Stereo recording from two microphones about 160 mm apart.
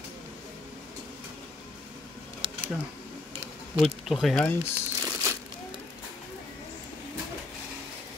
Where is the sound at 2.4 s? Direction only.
35° right (ahead or behind).